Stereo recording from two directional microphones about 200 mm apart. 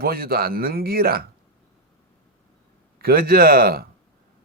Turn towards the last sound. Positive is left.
turn(degrees=-50)  # may be behind; listen again after turning